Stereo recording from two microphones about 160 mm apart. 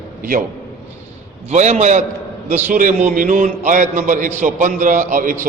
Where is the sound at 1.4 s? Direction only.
45° right (ahead or behind).